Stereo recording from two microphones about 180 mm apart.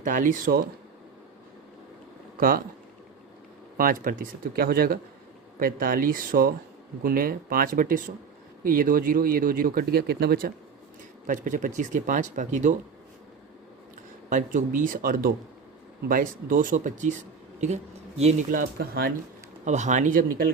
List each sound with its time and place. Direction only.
0.0 s speech: 45° right (ahead or behind)
2.4 s speech: 55° right (ahead or behind)
3.8 s speech: 50° right (ahead or behind)
11.3 s speech: 45° right (ahead or behind)
14.3 s speech: 45° right (ahead or behind)
18.2 s speech: 40° right (ahead or behind); by 19.1 s 55° right (ahead or behind)
19.6 s speech: 40° right (ahead or behind)